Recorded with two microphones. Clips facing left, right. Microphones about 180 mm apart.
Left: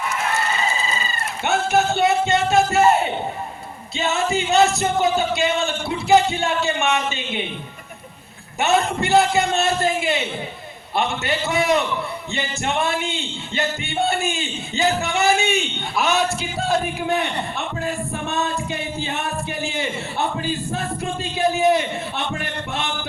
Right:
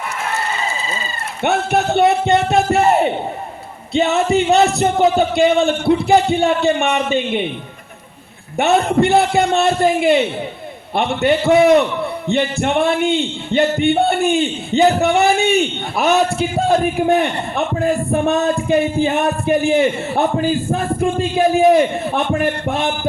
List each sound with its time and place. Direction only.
1.5 s speech: 60° right (ahead or behind)
8.5 s speech: 60° right (ahead or behind)
17.7 s music: 55° right (ahead or behind)